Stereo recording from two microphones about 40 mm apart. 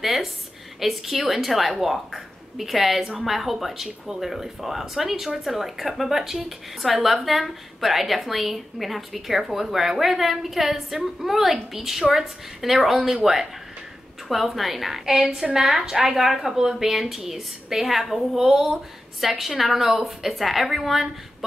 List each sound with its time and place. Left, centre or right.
0.0 s a woman's voice: centre
15.1 s a woman's voice: right
15.5 s a woman's voice: centre